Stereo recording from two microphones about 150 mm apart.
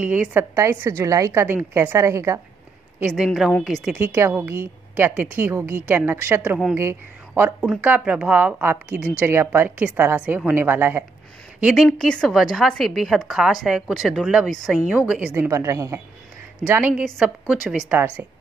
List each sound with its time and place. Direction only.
0.0 s a woman's voice: 10° right (ahead or behind)
3.1 s a woman's voice: centre (ahead or behind)
3.9 s a woman's voice: 15° right (ahead or behind)
11.7 s a woman's voice: centre (ahead or behind)